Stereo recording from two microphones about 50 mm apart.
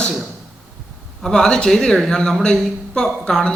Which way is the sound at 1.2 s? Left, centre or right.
Centre.